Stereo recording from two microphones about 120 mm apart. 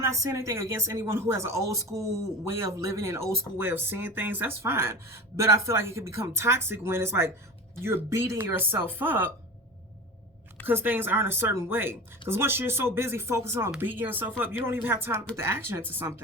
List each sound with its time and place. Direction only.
0.0 s speech: 25° right (ahead or behind)
10.7 s speech: 15° right (ahead or behind)